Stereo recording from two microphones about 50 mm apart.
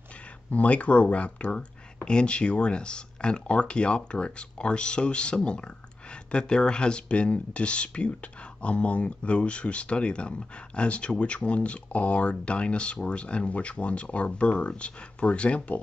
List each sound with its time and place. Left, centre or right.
0.5 s speech: left